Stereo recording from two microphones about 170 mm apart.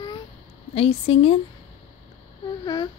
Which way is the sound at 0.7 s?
35° left (ahead or behind).